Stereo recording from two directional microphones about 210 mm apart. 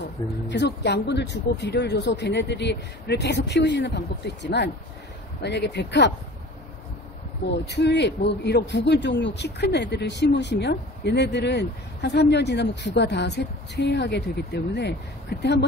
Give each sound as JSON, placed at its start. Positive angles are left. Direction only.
{"t": 0.5, "sound": "speech", "side_deg": 55}
{"t": 7.4, "sound": "speech", "side_deg": 55}